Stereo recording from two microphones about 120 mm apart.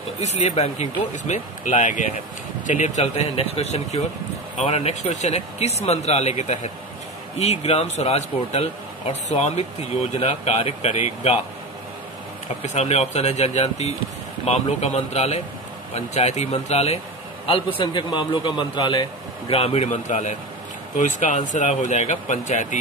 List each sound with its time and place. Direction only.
0.2 s speech: 65° left (ahead or behind)
7.3 s speech: 60° left (ahead or behind)
12.6 s speech: 65° left (ahead or behind)
17.5 s a man's voice: 50° left (ahead or behind); by 22.8 s 85° left